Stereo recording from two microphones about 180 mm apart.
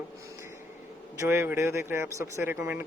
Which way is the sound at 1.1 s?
15° right (ahead or behind).